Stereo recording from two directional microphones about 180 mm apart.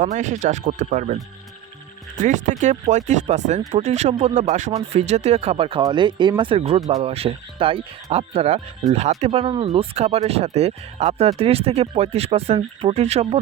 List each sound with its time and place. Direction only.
0.0 s speech: 40° right (ahead or behind)